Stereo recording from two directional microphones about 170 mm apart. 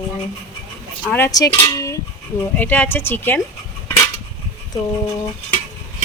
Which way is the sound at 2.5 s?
10° left (ahead or behind).